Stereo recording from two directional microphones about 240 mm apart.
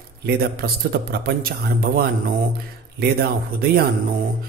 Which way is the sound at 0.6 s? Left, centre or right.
Right.